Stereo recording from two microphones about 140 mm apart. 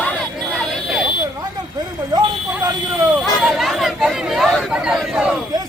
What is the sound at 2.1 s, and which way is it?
Speech, 30° right (ahead or behind).